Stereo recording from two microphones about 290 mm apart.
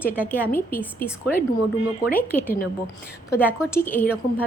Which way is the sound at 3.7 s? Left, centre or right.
Centre.